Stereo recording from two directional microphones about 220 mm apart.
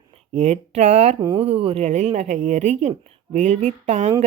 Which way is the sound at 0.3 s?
30° right (ahead or behind).